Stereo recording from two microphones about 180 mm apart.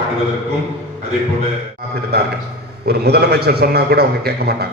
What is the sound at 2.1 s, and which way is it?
A man's voice, 65° right (ahead or behind).